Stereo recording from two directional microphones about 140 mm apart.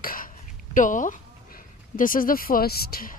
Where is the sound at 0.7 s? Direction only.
65° left (ahead or behind).